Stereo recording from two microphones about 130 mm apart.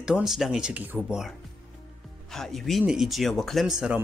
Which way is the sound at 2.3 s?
5° left (ahead or behind).